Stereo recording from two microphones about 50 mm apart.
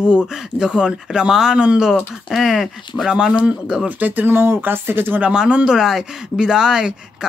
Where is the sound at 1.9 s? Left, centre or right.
Centre.